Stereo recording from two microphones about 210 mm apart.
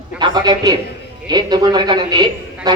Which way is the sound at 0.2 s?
20° right (ahead or behind).